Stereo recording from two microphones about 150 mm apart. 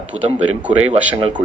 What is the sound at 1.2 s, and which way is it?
Speech, 35° right (ahead or behind).